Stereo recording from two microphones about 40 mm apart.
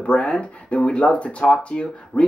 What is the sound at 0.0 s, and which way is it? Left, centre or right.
Speech, left.